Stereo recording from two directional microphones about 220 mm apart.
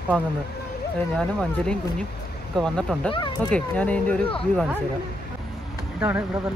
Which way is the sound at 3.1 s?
25° left (ahead or behind).